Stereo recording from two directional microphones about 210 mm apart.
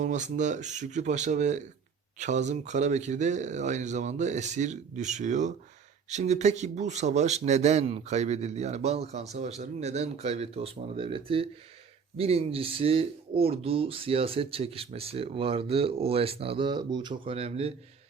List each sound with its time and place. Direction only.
0.0 s a man's voice: 35° right (ahead or behind)